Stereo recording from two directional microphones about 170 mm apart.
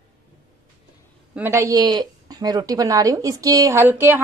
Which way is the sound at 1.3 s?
15° right (ahead or behind).